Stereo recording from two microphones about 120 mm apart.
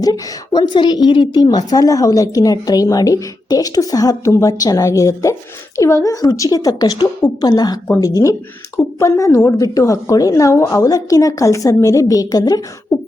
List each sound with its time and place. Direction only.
0.0 s a woman's voice: 35° left (ahead or behind)